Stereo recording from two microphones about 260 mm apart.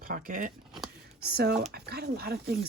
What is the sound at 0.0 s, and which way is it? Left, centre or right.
Speech, right.